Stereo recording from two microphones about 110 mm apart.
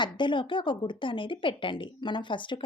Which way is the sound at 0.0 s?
45° left (ahead or behind).